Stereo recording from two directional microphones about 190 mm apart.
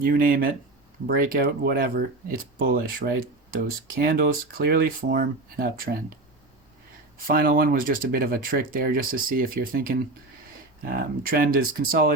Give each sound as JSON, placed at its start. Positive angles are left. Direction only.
{"t": 0.0, "sound": "speech", "side_deg": -45}
{"t": 7.3, "sound": "speech", "side_deg": -50}